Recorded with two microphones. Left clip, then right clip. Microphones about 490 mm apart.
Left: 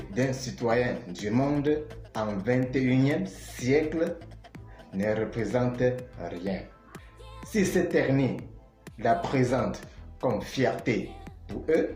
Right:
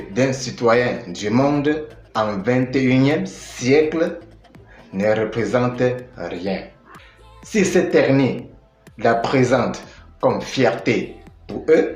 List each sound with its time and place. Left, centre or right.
0.1 s speech: right